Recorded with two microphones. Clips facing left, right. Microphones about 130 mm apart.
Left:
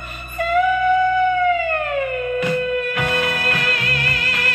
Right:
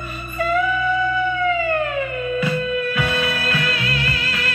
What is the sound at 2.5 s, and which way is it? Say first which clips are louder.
Music: left 1 dB; 50° left (ahead or behind).